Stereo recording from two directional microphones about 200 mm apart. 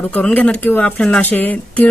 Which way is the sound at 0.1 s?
5° left (ahead or behind).